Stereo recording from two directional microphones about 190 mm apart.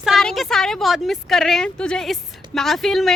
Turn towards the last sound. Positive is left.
turn(degrees=0)  # may be behind; listen again after turning